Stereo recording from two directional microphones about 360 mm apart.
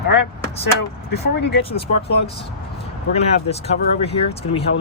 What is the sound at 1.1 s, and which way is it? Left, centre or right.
Speech, left.